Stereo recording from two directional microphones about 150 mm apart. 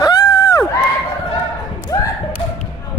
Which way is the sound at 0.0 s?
25° left (ahead or behind).